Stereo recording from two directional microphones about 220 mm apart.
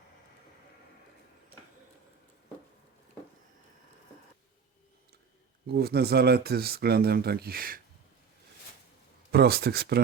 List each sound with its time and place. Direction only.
5.6 s speech: 45° right (ahead or behind)
9.3 s speech: 45° right (ahead or behind)